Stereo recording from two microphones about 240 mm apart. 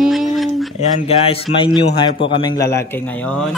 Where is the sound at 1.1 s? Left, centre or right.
Left.